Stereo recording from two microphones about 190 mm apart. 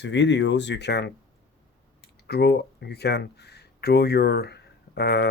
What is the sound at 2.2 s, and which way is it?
Speech, 60° left (ahead or behind).